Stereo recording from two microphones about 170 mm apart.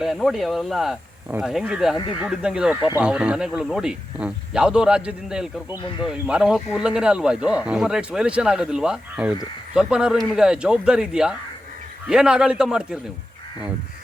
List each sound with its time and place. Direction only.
0.0 s speech: centre (ahead or behind)
2.0 s speech: 25° left (ahead or behind)
2.2 s speech: 5° right (ahead or behind)